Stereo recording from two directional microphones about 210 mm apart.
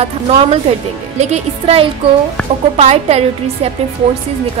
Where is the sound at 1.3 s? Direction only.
30° right (ahead or behind).